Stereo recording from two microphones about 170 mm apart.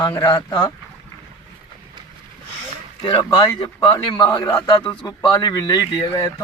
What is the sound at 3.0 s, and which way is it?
A man's voice, 30° left (ahead or behind).